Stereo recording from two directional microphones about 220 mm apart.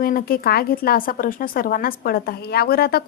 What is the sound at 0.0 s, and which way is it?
A woman's voice, 40° left (ahead or behind).